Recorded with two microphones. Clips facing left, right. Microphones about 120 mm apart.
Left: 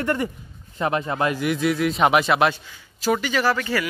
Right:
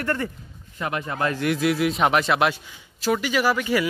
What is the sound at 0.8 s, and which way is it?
Speech, 30° left (ahead or behind).